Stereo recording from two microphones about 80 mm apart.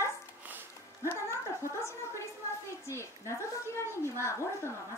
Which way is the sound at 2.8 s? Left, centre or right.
Left.